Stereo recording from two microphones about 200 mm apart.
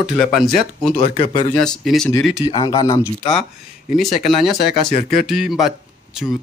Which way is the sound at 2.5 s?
20° left (ahead or behind).